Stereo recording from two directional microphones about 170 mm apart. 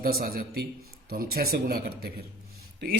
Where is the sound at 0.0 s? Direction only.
60° right (ahead or behind).